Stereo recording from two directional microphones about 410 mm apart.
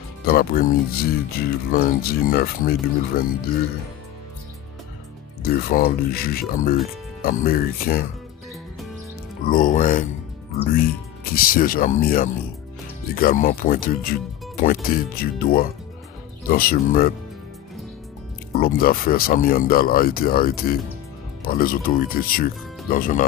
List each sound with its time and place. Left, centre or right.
0.2 s speech: left
5.4 s speech: left
9.5 s speech: centre
11.3 s speech: left
18.5 s speech: left